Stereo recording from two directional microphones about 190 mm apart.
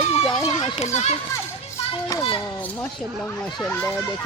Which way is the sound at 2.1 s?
25° left (ahead or behind).